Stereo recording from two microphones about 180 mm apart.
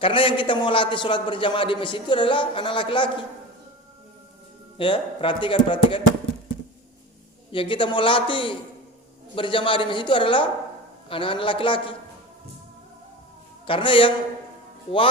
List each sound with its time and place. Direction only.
0.0 s a man's voice: 30° left (ahead or behind)
4.8 s a man's voice: 25° left (ahead or behind)
7.5 s a man's voice: 30° left (ahead or behind)
13.7 s a man's voice: 30° left (ahead or behind)